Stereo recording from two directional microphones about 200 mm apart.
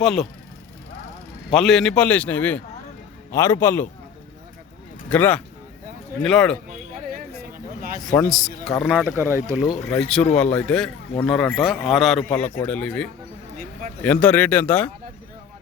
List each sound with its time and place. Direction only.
0.0 s a man's voice: centre (ahead or behind)
1.5 s a man's voice: centre (ahead or behind)
5.0 s a man's voice: 5° left (ahead or behind)
7.1 s a sound: 45° right (ahead or behind)
8.0 s a man's voice: 5° left (ahead or behind); by 9.4 s 10° right (ahead or behind)
9.6 s a man's voice: centre (ahead or behind)